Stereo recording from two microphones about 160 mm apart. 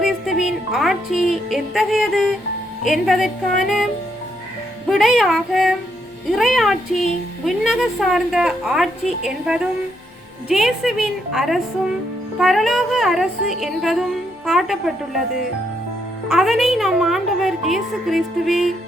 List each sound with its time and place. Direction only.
0.0 s music: centre (ahead or behind)
2.8 s a woman's voice: centre (ahead or behind)
4.9 s a woman's voice: centre (ahead or behind)
16.3 s a woman's voice: centre (ahead or behind)